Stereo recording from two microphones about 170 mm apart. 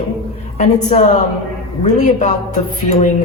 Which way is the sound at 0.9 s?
45° left (ahead or behind).